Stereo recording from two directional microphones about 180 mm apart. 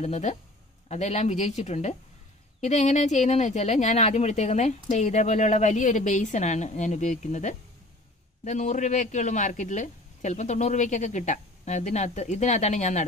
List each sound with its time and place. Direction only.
0.0 s speech: 40° left (ahead or behind)